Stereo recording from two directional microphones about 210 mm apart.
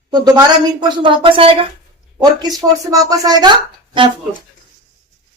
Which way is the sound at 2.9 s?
15° right (ahead or behind).